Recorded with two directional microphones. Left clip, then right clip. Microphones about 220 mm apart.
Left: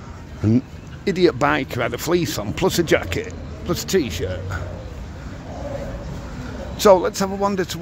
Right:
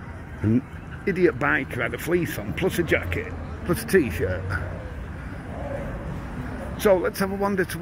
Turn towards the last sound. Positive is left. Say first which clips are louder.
# left 3 dB
turn(degrees=10)  # may be behind; listen again after turning